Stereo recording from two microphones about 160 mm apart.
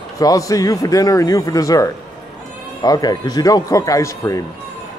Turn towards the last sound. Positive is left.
turn(degrees=20)  # may be behind; listen again after turning